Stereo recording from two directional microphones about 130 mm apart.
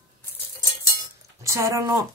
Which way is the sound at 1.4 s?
20° right (ahead or behind).